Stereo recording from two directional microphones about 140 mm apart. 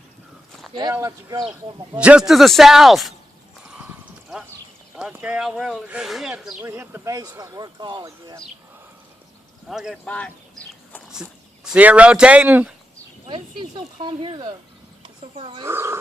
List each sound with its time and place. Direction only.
0.7 s speech: 30° right (ahead or behind)
2.0 s speech: 5° right (ahead or behind)
3.8 s horse: 5° right (ahead or behind)
5.1 s speech: 10° right (ahead or behind)
6.6 s speech: 15° right (ahead or behind)
9.6 s speech: centre (ahead or behind)
10.0 s speech: 10° left (ahead or behind)
11.1 s speech: 5° right (ahead or behind)
13.2 s speech: 35° right (ahead or behind)
15.6 s speech: 20° right (ahead or behind)